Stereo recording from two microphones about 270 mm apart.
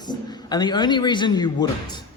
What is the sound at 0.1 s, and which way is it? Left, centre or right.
A man's voice, centre.